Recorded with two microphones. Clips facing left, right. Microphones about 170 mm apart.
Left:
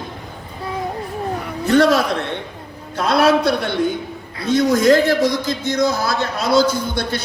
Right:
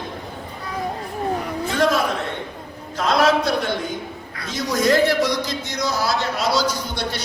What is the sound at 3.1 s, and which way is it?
Speech, 65° left (ahead or behind).